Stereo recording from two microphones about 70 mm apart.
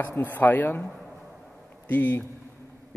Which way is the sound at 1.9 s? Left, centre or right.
Left.